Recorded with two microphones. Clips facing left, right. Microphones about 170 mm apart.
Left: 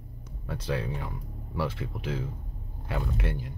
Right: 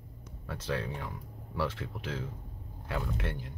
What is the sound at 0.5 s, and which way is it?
Speech, 10° left (ahead or behind).